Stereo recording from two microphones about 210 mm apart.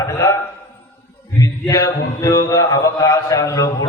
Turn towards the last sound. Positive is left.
turn(degrees=15)  # may be behind; listen again after turning